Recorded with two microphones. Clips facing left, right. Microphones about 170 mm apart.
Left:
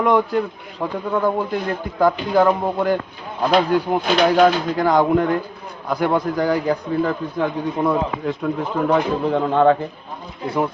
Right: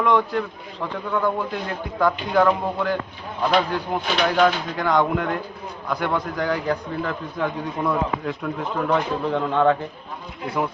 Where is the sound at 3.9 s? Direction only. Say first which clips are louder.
Left 4 dB; 40° left (ahead or behind).